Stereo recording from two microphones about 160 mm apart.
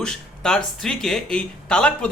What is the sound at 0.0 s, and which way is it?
Speech, 5° left (ahead or behind).